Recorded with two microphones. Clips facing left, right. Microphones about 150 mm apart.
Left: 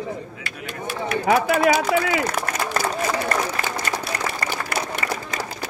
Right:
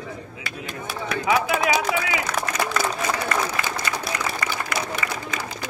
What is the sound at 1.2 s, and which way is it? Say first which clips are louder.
Speech: left 4 dB; 45° left (ahead or behind).